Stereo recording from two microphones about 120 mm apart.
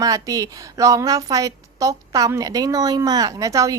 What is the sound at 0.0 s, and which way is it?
Speech, 30° right (ahead or behind).